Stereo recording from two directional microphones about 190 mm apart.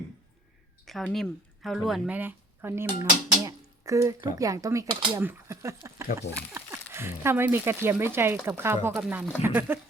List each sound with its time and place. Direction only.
0.9 s speech: centre (ahead or behind)